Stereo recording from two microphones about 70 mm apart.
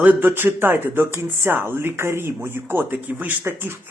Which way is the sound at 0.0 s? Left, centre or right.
Right.